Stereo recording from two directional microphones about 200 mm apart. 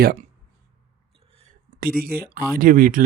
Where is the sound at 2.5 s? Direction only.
45° right (ahead or behind).